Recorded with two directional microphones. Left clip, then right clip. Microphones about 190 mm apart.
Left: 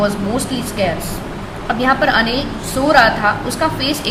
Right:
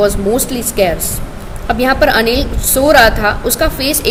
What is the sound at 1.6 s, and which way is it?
A woman's voice, 55° right (ahead or behind).